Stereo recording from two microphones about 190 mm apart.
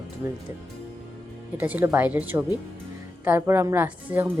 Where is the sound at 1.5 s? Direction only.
10° right (ahead or behind).